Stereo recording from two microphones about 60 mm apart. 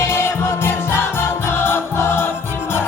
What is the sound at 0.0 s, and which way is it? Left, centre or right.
Music, left.